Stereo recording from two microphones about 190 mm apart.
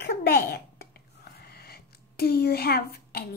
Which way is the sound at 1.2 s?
55° left (ahead or behind).